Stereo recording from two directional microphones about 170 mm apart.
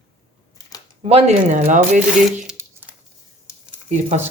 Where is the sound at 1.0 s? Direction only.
35° right (ahead or behind).